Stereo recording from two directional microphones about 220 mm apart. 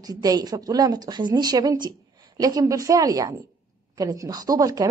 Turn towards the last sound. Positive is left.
turn(degrees=-15)  # may be behind; listen again after turning